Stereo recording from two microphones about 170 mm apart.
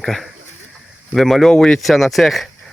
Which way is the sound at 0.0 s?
Centre (ahead or behind).